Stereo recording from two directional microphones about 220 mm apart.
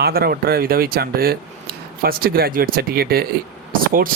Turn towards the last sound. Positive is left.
turn(degrees=-40)  # may be behind; listen again after turning